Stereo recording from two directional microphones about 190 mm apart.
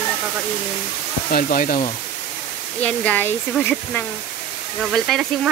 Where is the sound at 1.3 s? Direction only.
45° left (ahead or behind).